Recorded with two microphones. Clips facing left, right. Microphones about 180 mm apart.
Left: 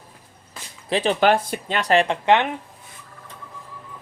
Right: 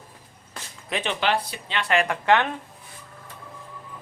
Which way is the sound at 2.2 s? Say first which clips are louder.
Left 2 dB; 20° left (ahead or behind).